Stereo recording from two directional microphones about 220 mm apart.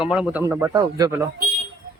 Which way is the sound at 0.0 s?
5° right (ahead or behind).